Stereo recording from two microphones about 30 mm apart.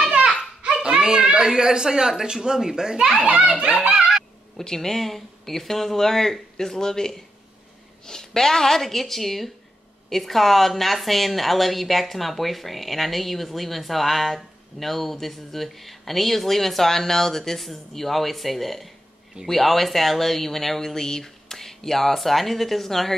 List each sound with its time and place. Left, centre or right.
0.8 s speech: right
3.3 s a child's voice: right
3.6 s speech: right
4.7 s a woman's voice: centre